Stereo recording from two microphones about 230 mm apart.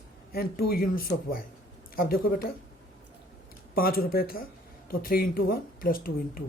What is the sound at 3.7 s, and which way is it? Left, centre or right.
Speech, left.